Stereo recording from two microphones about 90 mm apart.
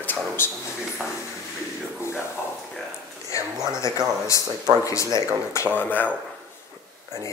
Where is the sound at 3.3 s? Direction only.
35° left (ahead or behind).